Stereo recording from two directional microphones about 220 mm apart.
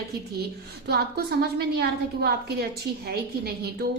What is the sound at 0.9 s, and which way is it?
A woman's voice, 45° right (ahead or behind).